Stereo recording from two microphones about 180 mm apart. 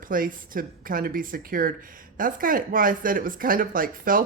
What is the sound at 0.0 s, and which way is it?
Speech, 50° right (ahead or behind).